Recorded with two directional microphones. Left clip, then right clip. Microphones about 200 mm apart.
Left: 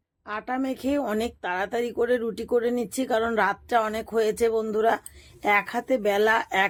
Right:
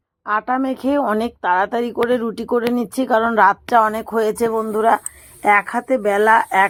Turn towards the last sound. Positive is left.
turn(degrees=0)  # may be behind; listen again after turning